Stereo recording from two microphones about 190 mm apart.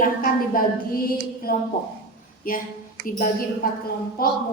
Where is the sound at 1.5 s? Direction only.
50° left (ahead or behind).